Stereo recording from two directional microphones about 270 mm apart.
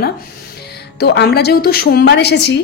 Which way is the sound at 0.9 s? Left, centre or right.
Left.